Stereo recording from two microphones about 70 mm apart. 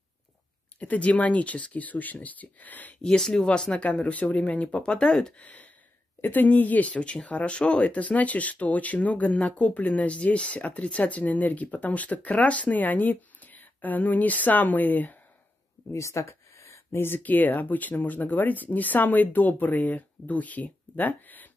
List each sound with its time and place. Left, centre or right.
0.7 s speech: centre
3.0 s speech: centre
5.4 s speech: left
15.9 s speech: left